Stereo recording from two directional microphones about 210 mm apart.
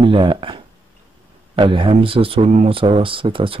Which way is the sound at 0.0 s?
25° right (ahead or behind).